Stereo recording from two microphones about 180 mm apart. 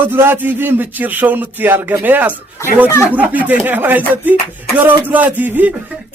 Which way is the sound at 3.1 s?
10° right (ahead or behind).